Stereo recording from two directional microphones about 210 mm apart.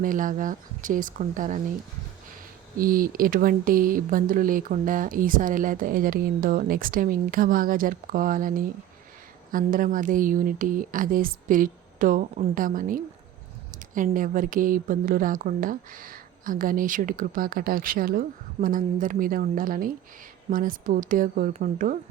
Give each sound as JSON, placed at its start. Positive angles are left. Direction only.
{"t": 0.0, "sound": "speech", "side_deg": -40}
{"t": 2.7, "sound": "speech", "side_deg": -45}